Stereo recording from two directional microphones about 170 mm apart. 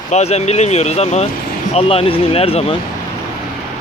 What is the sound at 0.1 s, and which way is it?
Speech, 40° left (ahead or behind).